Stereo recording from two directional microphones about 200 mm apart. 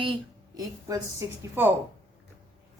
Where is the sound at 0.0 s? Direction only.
20° right (ahead or behind).